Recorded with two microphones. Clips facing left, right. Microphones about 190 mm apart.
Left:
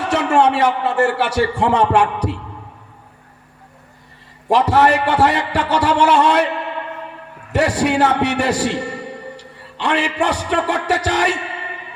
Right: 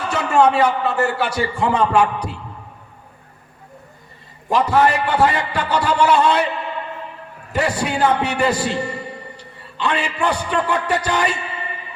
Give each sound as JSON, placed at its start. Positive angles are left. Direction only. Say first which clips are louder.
{"t": 0.0, "sound": "a man's voice", "louder": "left 1 dB", "side_deg": 70}
{"t": 4.4, "sound": "a man's voice", "louder": "left 2 dB", "side_deg": 75}